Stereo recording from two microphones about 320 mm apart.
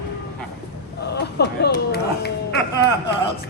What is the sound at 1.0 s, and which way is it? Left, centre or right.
Speech, left.